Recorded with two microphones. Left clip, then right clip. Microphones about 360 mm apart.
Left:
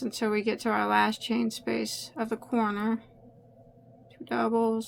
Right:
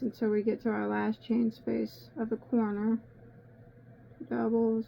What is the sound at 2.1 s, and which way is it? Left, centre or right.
Speech, left.